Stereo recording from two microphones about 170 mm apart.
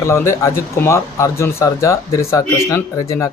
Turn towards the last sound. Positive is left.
turn(degrees=20)  # may be behind; listen again after turning